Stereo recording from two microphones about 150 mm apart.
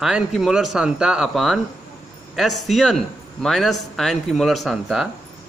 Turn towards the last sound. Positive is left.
turn(degrees=0)  # may be behind; listen again after turning